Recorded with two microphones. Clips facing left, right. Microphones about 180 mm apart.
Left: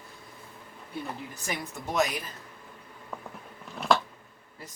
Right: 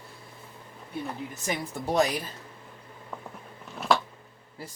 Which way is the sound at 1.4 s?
30° right (ahead or behind).